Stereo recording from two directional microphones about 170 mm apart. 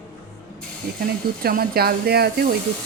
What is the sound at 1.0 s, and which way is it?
Speech, 60° right (ahead or behind).